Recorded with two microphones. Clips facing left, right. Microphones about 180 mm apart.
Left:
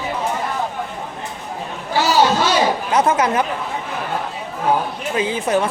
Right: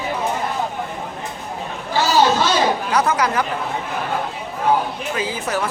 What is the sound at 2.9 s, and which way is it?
Speech, 25° left (ahead or behind).